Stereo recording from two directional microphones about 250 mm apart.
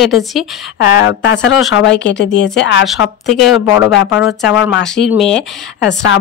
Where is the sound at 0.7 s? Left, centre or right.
Left.